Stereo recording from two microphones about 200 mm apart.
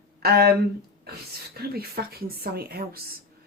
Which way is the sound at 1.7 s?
50° right (ahead or behind).